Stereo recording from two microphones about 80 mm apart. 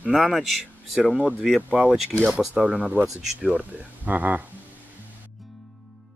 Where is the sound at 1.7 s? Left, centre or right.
Centre.